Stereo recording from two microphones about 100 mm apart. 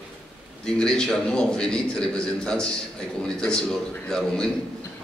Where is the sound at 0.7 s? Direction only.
5° left (ahead or behind).